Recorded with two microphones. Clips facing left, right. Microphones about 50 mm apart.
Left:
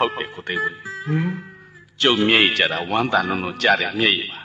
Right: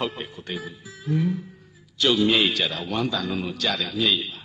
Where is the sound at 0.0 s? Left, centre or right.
Left.